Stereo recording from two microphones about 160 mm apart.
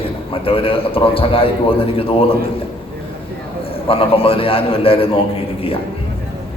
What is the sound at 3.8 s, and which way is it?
A man's voice, 35° left (ahead or behind).